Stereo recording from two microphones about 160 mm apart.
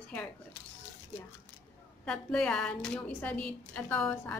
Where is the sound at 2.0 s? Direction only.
5° left (ahead or behind).